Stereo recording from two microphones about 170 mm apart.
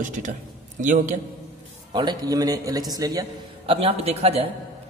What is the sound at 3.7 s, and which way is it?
Speech, 35° right (ahead or behind).